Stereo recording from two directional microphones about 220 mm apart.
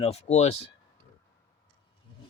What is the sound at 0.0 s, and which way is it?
Speech, 30° left (ahead or behind).